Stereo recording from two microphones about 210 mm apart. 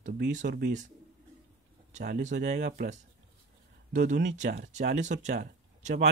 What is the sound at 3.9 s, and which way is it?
Speech, 40° right (ahead or behind).